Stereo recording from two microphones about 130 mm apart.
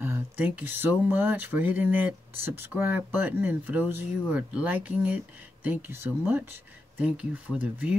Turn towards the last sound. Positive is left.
turn(degrees=-10)  # may be behind; listen again after turning